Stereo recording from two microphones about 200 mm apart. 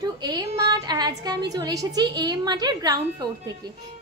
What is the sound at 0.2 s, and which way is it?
A woman's voice, 20° right (ahead or behind).